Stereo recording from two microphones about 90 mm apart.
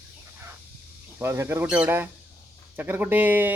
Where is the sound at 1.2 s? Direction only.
30° right (ahead or behind).